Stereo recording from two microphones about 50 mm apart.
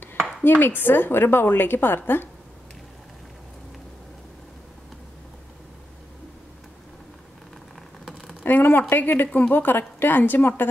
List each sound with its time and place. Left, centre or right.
0.4 s a woman's voice: left
8.5 s a woman's voice: left